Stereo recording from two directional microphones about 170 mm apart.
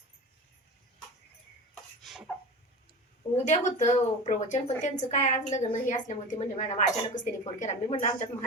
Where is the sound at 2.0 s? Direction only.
Centre (ahead or behind).